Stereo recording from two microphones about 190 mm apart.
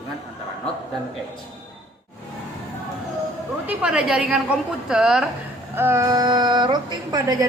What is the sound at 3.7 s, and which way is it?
A woman's voice, 5° right (ahead or behind).